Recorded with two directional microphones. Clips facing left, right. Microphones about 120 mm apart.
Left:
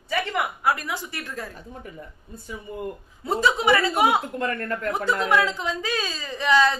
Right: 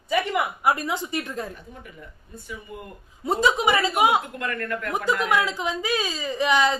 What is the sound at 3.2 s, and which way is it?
Speech, 20° right (ahead or behind).